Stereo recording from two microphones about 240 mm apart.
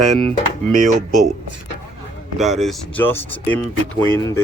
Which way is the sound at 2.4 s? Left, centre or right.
Centre.